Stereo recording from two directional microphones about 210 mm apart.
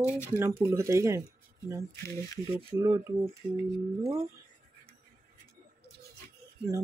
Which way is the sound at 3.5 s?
15° right (ahead or behind).